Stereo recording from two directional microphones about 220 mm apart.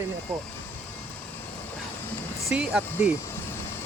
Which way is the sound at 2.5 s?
5° right (ahead or behind).